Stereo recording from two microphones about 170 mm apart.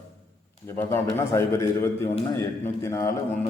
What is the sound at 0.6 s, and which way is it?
A man's voice, 15° left (ahead or behind).